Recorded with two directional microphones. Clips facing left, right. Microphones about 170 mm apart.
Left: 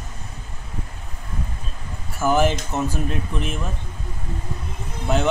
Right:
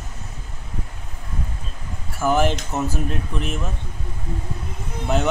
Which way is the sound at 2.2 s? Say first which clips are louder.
Even; centre (ahead or behind).